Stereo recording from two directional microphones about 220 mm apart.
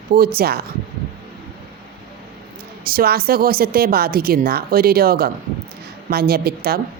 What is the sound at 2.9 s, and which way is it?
Speech, 45° right (ahead or behind).